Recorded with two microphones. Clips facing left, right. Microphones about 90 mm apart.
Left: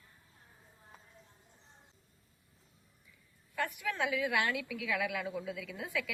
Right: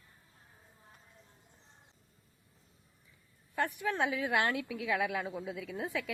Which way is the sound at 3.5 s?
30° right (ahead or behind).